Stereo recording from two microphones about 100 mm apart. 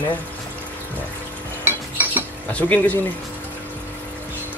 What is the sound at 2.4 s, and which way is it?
Speech, 15° left (ahead or behind).